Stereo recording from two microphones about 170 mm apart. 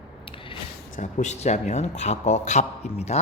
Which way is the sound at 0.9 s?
45° left (ahead or behind).